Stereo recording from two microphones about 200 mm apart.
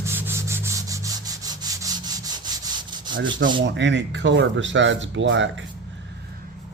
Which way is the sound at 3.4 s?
70° right (ahead or behind).